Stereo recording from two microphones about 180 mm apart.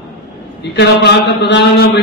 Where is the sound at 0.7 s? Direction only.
65° left (ahead or behind).